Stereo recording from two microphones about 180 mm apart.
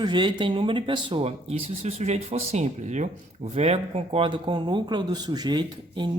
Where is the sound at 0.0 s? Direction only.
25° right (ahead or behind).